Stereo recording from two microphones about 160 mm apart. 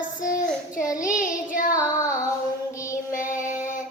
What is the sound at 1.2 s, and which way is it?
Child singing, 55° left (ahead or behind).